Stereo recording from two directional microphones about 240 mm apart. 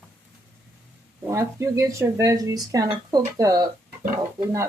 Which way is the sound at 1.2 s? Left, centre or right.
Centre.